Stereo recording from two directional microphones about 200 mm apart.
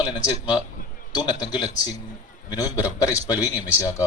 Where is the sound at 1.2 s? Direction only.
20° left (ahead or behind).